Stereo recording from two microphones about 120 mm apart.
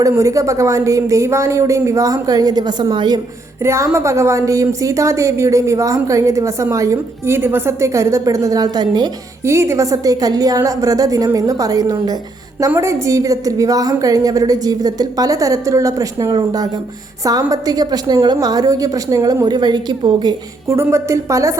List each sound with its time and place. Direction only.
0.0 s a woman's voice: 25° right (ahead or behind)
3.6 s a woman's voice: 20° right (ahead or behind)
9.5 s a woman's voice: 25° right (ahead or behind); by 20.3 s 40° right (ahead or behind)
20.7 s a woman's voice: 25° right (ahead or behind)